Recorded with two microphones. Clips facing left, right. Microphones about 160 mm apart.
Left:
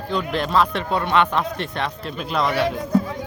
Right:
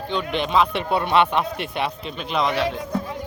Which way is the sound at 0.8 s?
15° right (ahead or behind).